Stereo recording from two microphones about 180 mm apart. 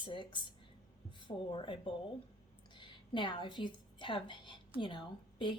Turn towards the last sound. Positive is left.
turn(degrees=25)  # may be behind; listen again after turning